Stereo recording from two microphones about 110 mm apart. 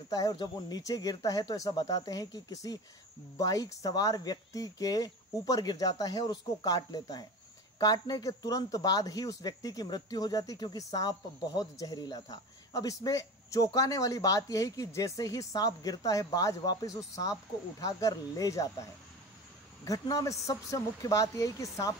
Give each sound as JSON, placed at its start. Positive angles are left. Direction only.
{"t": 0.1, "sound": "speech", "side_deg": 35}